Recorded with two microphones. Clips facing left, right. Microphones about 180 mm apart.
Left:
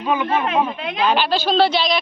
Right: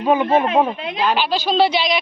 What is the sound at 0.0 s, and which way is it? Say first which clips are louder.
Speech: right 4 dB; 35° right (ahead or behind).